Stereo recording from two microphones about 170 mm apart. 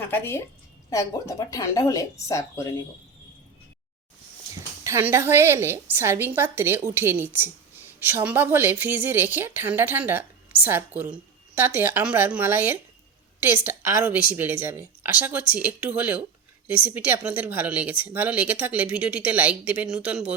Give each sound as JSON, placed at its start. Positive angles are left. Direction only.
{"t": 0.0, "sound": "a woman's voice", "side_deg": 15}
{"t": 4.8, "sound": "speech", "side_deg": -15}